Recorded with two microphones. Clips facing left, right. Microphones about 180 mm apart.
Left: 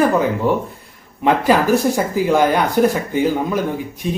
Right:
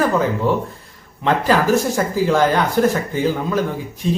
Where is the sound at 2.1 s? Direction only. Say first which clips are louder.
Even; 15° left (ahead or behind).